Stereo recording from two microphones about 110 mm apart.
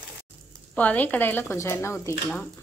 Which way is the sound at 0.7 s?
15° left (ahead or behind).